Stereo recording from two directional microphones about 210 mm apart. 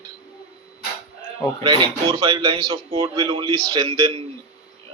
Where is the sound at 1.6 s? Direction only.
20° right (ahead or behind).